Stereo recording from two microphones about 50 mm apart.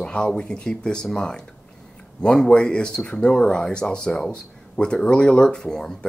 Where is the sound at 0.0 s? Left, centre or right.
Centre.